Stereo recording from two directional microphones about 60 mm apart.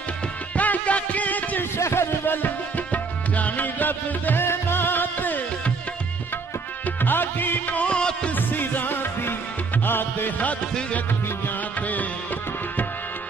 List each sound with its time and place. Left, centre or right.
0.6 s music: left
1.8 s music: left
2.2 s music: left
7.0 s music: left; by 8.3 s centre
8.4 s music: left